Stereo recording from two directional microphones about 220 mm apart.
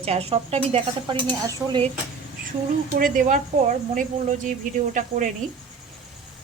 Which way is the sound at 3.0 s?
35° right (ahead or behind).